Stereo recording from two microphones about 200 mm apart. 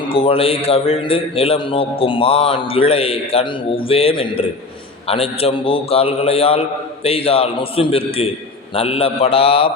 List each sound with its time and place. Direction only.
0.1 s a man's voice: 25° left (ahead or behind)